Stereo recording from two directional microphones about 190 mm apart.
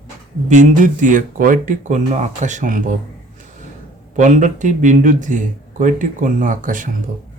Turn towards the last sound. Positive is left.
turn(degrees=-45)  # may be behind; listen again after turning